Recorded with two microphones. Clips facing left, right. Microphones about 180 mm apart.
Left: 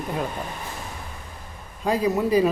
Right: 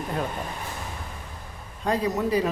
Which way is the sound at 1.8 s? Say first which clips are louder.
Left 3 dB; 10° left (ahead or behind).